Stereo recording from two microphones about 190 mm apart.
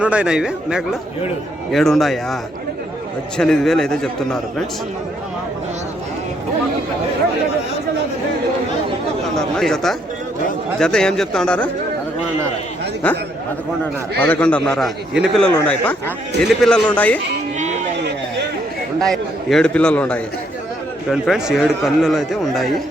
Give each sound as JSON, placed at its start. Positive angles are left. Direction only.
{"t": 0.0, "sound": "a man's voice", "side_deg": -5}
{"t": 9.6, "sound": "a man's voice", "side_deg": 0}
{"t": 14.2, "sound": "a man's voice", "side_deg": 10}
{"t": 17.6, "sound": "a sound", "side_deg": -40}
{"t": 18.9, "sound": "a man's voice", "side_deg": 0}